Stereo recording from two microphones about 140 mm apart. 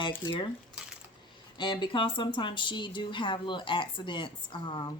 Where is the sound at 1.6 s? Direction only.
35° left (ahead or behind).